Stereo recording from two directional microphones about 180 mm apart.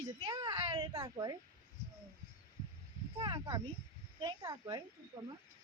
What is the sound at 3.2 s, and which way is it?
A child's voice, 20° right (ahead or behind).